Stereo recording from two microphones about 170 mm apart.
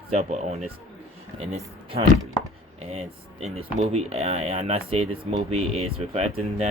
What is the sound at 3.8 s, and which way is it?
Speech, 40° right (ahead or behind).